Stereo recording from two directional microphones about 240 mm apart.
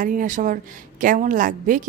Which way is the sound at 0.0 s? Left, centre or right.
Right.